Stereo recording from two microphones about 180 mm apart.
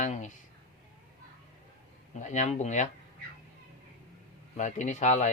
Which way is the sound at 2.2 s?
40° left (ahead or behind).